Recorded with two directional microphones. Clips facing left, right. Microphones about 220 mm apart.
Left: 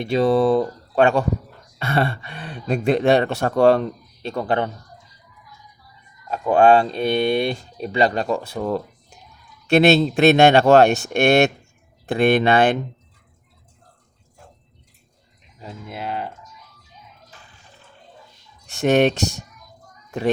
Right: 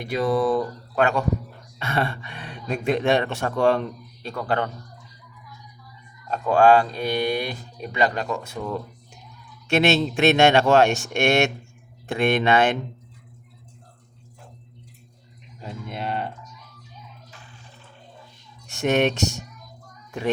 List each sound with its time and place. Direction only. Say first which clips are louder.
0.0 s speech: left 5 dB; 25° left (ahead or behind)
4.2 s speech: left 3 dB; 25° left (ahead or behind)
6.4 s speech: left 2 dB; 20° left (ahead or behind)
9.6 s speech: left 5 dB; 35° left (ahead or behind)
15.6 s speech: even; centre (ahead or behind)
18.7 s speech: left 4 dB; 35° left (ahead or behind)
20.1 s a sound: left 4 dB; 35° left (ahead or behind)